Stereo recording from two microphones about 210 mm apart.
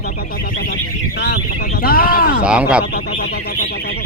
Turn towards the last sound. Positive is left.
turn(degrees=45)  # may be behind; listen again after turning